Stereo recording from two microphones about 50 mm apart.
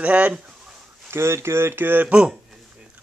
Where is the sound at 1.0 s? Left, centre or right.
Right.